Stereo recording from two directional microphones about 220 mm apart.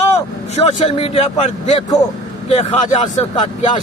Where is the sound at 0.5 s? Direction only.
30° left (ahead or behind).